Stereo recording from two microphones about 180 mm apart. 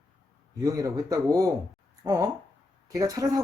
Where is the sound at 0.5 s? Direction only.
20° right (ahead or behind).